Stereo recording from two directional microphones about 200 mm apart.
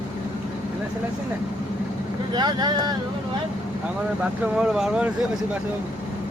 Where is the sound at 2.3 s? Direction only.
20° right (ahead or behind).